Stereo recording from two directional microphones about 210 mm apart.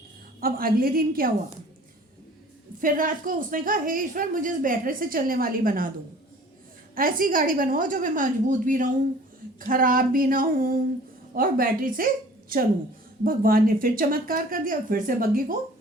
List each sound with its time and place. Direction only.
0.3 s speech: 45° right (ahead or behind)
2.8 s a woman's voice: 40° right (ahead or behind)
6.9 s a woman's voice: 40° right (ahead or behind)